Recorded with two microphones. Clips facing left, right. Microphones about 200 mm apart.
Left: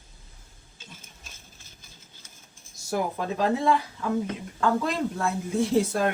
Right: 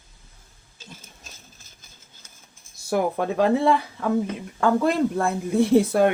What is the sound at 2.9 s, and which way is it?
Speech, 60° right (ahead or behind).